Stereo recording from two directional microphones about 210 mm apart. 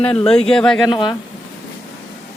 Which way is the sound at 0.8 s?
20° left (ahead or behind).